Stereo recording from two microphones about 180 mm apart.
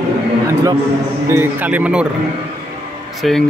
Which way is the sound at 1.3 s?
10° right (ahead or behind).